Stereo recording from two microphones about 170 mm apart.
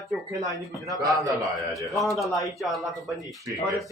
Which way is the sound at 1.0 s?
20° right (ahead or behind).